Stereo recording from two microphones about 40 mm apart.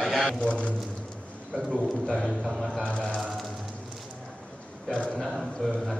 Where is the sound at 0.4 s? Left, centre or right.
Left.